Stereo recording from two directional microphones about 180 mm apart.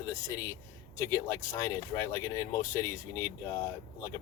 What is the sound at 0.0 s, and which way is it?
Speech, 15° left (ahead or behind).